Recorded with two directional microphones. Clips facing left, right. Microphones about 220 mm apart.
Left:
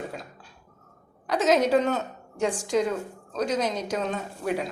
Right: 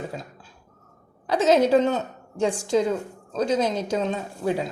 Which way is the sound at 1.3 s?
30° right (ahead or behind).